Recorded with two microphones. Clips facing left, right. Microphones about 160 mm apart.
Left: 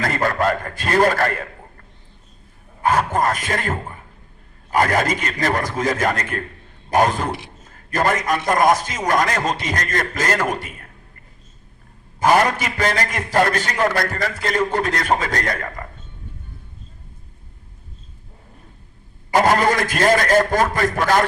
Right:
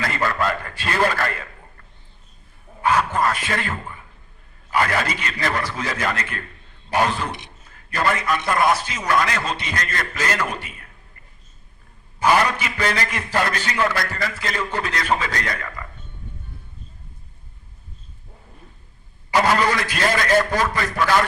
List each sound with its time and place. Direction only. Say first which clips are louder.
0.0 s a man's voice: left 3 dB; 45° left (ahead or behind)
2.8 s a man's voice: left 1 dB; 45° left (ahead or behind)
12.2 s a man's voice: left 2 dB; 45° left (ahead or behind)
19.3 s a man's voice: left 3 dB; 45° left (ahead or behind)